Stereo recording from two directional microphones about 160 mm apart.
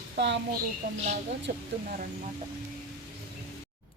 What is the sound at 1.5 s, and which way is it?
Speech, 65° right (ahead or behind).